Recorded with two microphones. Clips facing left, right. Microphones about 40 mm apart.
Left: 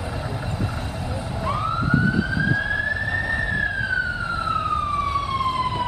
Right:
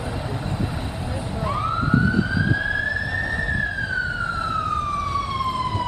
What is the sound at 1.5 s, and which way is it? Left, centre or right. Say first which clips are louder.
Emergency vehicle: even; centre.